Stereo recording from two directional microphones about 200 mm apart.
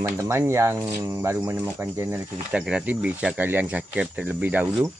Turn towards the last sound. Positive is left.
turn(degrees=-5)  # may be behind; listen again after turning